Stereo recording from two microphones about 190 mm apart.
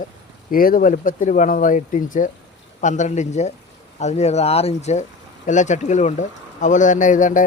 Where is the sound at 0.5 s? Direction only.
50° left (ahead or behind).